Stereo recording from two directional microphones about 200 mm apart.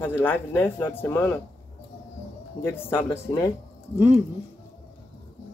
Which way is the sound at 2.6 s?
10° left (ahead or behind).